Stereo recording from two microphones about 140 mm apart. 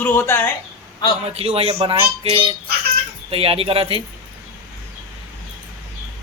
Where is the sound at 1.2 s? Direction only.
45° right (ahead or behind).